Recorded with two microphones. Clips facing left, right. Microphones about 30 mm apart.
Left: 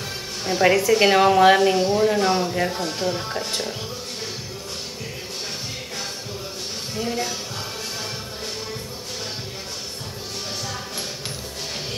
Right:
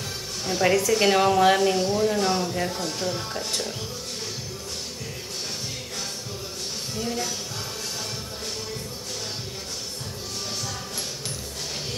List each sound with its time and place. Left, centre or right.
0.5 s a woman's voice: centre
7.0 s a woman's voice: centre